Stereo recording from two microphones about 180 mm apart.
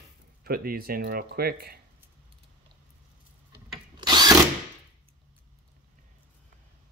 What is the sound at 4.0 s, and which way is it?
Drill, 25° right (ahead or behind).